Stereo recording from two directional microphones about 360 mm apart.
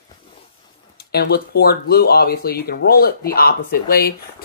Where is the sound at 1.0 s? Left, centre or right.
Left.